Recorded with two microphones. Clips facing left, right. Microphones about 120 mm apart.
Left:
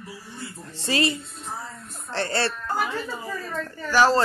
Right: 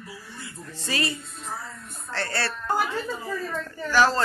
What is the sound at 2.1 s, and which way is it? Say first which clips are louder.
Speech: left 4 dB; 20° left (ahead or behind).